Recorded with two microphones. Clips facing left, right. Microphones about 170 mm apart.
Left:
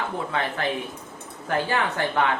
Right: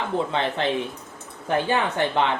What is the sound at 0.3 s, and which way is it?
Speech, 25° right (ahead or behind).